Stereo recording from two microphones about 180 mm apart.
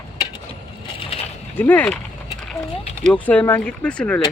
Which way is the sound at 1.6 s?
10° left (ahead or behind).